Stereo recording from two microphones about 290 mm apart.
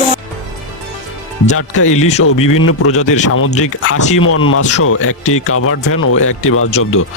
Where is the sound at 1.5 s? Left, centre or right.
Left.